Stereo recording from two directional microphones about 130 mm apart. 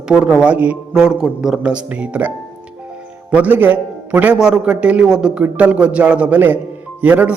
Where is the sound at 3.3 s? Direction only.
10° right (ahead or behind).